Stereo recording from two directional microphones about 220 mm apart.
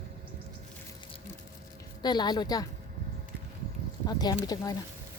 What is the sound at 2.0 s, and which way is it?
Speech, 20° left (ahead or behind).